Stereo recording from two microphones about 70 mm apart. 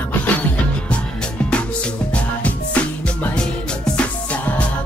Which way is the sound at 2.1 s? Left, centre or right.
Centre.